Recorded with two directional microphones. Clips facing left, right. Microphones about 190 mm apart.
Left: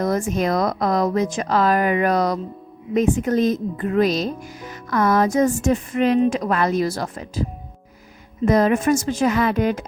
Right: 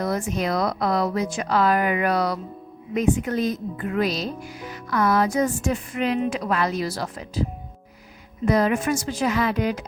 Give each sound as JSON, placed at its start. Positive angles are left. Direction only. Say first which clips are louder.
{"t": 0.0, "sound": "a woman's voice", "louder": "left 4 dB", "side_deg": 45}
{"t": 8.4, "sound": "a woman's voice", "louder": "left 4 dB", "side_deg": 45}